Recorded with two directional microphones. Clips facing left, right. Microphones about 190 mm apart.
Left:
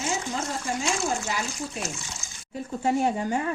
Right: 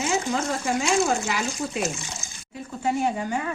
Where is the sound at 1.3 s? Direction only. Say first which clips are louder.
Right 3 dB; 90° right.